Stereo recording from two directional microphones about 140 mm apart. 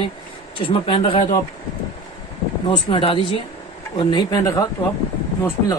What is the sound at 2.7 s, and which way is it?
Speech, 40° left (ahead or behind).